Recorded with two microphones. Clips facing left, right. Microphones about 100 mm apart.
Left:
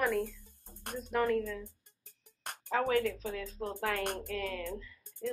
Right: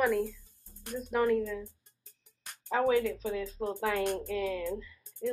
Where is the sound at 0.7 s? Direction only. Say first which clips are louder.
Right 3 dB; 60° left (ahead or behind).